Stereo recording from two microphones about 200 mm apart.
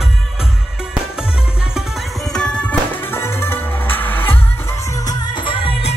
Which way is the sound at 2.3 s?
5° left (ahead or behind).